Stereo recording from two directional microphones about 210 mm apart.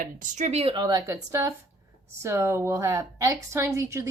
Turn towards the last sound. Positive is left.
turn(degrees=-15)  # may be behind; listen again after turning